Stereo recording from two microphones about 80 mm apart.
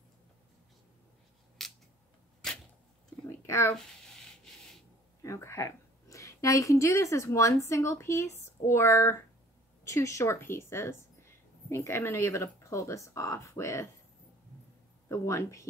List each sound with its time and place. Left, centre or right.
1.6 s scissors: centre
2.4 s arrow: centre
3.3 s a sound: left
5.2 s a woman's voice: left
15.0 s speech: left